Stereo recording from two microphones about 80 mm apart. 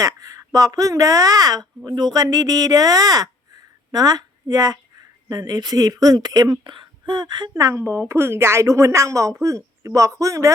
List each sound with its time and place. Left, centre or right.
0.0 s a woman's voice: right
6.7 s speech: right